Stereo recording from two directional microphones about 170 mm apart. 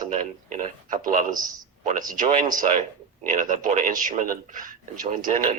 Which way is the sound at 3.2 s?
50° right (ahead or behind).